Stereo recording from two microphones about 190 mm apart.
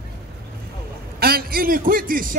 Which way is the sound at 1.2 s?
55° right (ahead or behind).